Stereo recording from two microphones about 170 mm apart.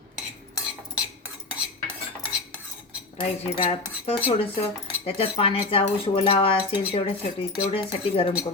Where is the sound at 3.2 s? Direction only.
35° left (ahead or behind).